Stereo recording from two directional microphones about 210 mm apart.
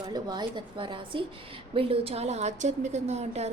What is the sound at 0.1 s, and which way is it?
A woman's voice, 20° right (ahead or behind).